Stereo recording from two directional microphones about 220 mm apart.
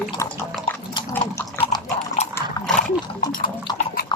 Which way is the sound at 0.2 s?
15° left (ahead or behind).